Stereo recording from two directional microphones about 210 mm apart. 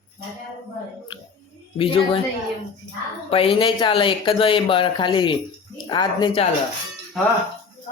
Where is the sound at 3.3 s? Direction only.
25° left (ahead or behind).